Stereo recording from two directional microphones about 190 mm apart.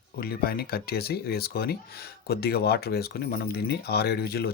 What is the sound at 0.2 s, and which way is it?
Speech, 55° left (ahead or behind).